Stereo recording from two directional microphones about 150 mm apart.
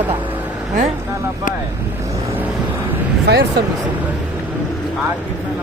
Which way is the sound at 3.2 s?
90° right.